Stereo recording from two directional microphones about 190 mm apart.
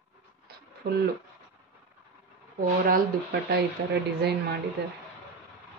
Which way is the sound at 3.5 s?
60° right (ahead or behind).